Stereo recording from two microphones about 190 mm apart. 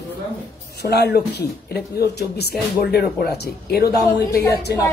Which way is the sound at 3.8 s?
60° left (ahead or behind).